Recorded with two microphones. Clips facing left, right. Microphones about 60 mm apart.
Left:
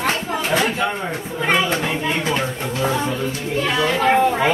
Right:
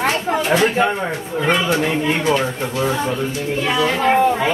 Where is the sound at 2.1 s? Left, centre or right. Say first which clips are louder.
Right 4 dB; right.